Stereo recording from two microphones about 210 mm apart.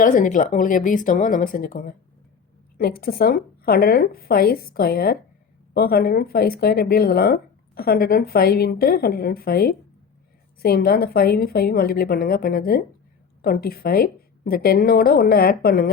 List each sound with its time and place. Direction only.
0.0 s a woman's voice: 40° left (ahead or behind)